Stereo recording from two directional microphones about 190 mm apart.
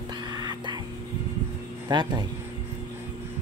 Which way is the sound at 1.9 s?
20° right (ahead or behind).